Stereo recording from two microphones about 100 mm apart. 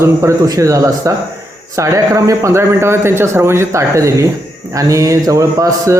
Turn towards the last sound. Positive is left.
turn(degrees=-35)  # may be behind; listen again after turning